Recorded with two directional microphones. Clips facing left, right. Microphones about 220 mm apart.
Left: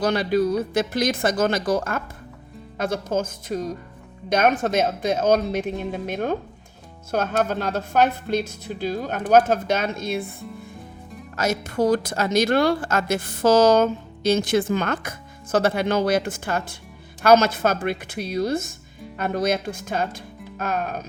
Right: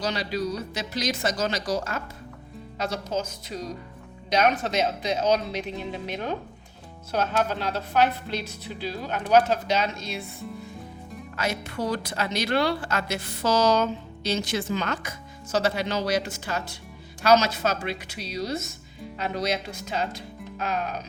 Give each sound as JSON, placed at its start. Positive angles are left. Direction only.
{"t": 0.0, "sound": "speech", "side_deg": 55}
{"t": 11.3, "sound": "speech", "side_deg": 45}